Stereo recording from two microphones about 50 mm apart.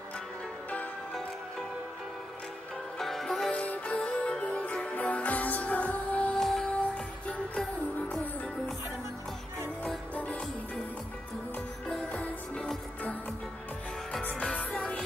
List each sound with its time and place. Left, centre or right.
3.0 s music: centre
3.5 s music: left
6.4 s music: centre
8.1 s music: left
10.1 s music: left
14.3 s music: centre